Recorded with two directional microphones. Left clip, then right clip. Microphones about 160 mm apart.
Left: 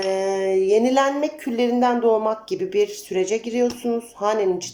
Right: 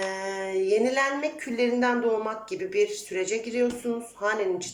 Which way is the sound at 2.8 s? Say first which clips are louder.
Left 2 dB; 25° left (ahead or behind).